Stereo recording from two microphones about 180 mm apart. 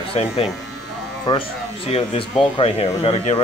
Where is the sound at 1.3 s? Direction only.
20° left (ahead or behind).